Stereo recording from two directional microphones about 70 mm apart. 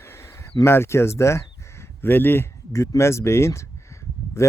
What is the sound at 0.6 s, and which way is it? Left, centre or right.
Speech, left.